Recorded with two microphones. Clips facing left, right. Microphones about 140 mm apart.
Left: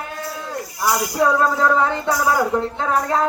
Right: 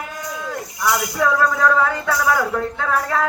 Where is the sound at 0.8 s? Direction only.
25° left (ahead or behind).